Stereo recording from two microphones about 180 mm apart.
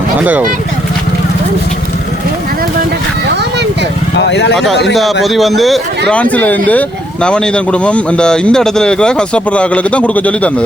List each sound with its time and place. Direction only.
0.2 s speech: 10° right (ahead or behind)
4.2 s speech: 70° left (ahead or behind)
4.5 s speech: centre (ahead or behind)